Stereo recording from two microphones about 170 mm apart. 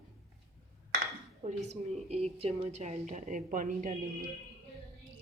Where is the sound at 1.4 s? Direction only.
40° right (ahead or behind).